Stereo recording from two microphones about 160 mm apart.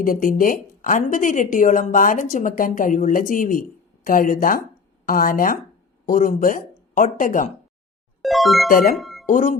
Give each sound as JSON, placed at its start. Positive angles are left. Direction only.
{"t": 0.0, "sound": "a woman's voice", "side_deg": 60}
{"t": 8.2, "sound": "speech", "side_deg": 0}
{"t": 8.7, "sound": "a woman's voice", "side_deg": 60}
{"t": 9.0, "sound": "music", "side_deg": 0}
{"t": 9.2, "sound": "speech", "side_deg": 55}